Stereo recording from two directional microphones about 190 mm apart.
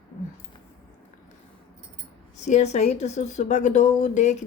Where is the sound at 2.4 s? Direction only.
35° left (ahead or behind).